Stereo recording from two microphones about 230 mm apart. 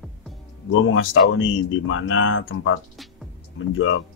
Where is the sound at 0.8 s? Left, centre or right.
Left.